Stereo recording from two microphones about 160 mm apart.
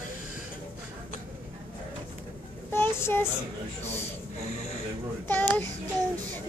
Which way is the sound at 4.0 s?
45° left (ahead or behind).